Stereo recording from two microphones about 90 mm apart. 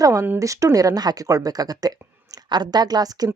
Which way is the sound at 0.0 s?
35° right (ahead or behind).